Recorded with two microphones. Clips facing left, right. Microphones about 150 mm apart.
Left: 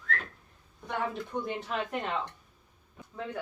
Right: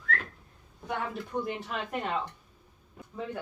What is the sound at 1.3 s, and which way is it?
Speech, 5° right (ahead or behind).